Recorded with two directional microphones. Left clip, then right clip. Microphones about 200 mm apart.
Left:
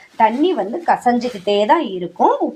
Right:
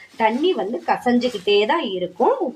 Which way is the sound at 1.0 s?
25° left (ahead or behind).